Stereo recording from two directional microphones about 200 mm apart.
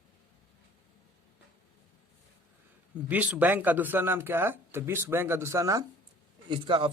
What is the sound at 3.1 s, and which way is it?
Speech, 5° right (ahead or behind).